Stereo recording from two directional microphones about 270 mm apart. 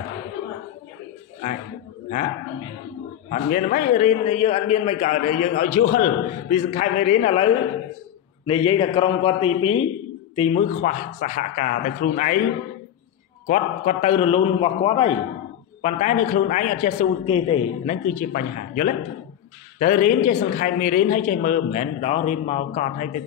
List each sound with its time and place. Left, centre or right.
3.3 s a man's voice: left
13.5 s a man's voice: left
18.0 s a man's voice: left